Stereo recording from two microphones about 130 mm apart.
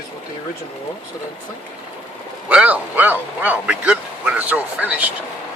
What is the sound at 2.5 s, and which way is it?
Speech, 10° right (ahead or behind).